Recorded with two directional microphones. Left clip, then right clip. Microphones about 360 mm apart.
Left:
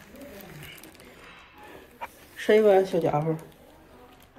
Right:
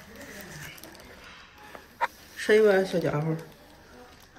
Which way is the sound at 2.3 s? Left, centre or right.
Centre.